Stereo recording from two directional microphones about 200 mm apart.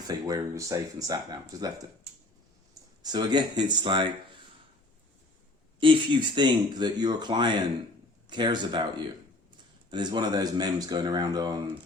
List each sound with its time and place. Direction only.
0.1 s speech: 15° right (ahead or behind)
3.0 s speech: 20° right (ahead or behind)
5.8 s speech: 25° right (ahead or behind)
9.9 s speech: 20° right (ahead or behind)